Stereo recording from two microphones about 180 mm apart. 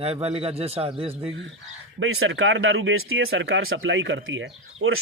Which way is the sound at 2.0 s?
85° right.